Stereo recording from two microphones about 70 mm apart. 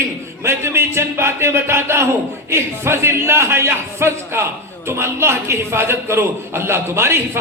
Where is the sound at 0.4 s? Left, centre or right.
Right.